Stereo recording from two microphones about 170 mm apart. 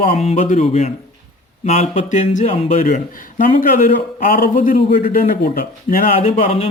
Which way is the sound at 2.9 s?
50° left (ahead or behind).